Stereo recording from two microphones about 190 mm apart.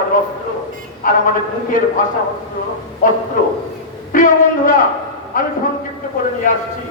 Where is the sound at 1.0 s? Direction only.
45° left (ahead or behind).